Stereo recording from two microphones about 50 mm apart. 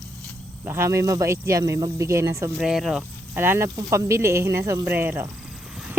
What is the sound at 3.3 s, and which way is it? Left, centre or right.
Speech, right.